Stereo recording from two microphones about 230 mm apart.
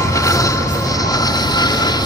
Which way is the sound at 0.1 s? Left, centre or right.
Centre.